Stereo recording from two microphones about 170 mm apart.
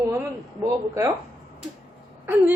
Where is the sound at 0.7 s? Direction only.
20° right (ahead or behind).